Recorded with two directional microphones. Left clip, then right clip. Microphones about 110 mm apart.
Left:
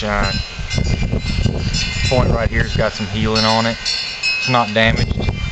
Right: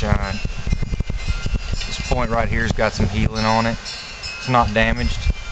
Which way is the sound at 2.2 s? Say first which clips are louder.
Left 2 dB; 40° right (ahead or behind).